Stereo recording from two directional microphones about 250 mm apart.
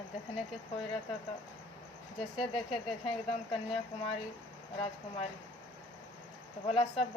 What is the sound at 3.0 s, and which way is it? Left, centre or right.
Speech, left.